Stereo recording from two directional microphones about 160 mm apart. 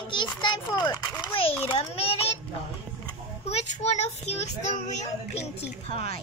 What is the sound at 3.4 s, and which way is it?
A child's voice, 45° left (ahead or behind).